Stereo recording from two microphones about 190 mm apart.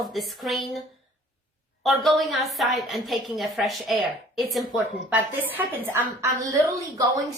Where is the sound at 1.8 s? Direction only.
Centre (ahead or behind); by 7.0 s 15° right (ahead or behind).